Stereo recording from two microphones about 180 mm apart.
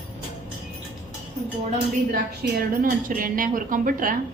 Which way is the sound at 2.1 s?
55° right (ahead or behind).